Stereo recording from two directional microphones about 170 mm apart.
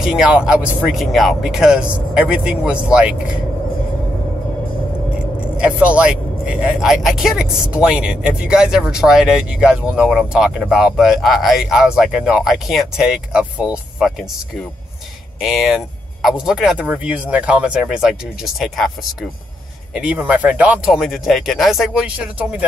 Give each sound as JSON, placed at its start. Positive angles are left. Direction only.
{"t": 0.0, "sound": "speech", "side_deg": -5}
{"t": 5.6, "sound": "speech", "side_deg": -5}
{"t": 15.4, "sound": "speech", "side_deg": 0}